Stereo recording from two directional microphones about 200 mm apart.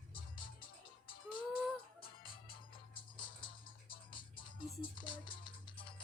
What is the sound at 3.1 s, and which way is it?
Music, 25° left (ahead or behind).